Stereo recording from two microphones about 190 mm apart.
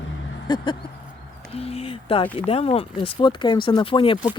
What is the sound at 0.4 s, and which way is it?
Speech, 25° left (ahead or behind).